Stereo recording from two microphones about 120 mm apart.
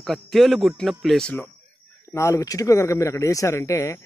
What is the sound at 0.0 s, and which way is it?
Speech, centre (ahead or behind).